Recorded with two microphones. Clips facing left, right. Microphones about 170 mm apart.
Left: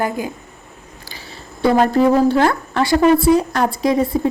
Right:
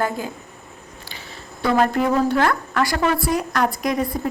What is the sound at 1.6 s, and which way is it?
A woman's voice, 30° left (ahead or behind).